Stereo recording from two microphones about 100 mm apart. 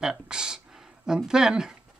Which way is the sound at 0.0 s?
5° right (ahead or behind).